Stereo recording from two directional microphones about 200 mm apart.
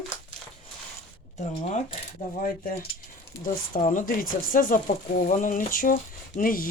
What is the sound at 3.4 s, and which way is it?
Speech, 40° left (ahead or behind).